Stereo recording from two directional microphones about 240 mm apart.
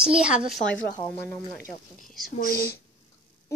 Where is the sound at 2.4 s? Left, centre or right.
Left.